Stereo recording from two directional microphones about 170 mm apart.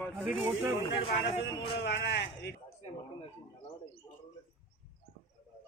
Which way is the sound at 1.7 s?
90° left.